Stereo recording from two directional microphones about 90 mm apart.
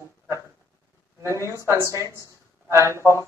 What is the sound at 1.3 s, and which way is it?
Speech, 35° left (ahead or behind).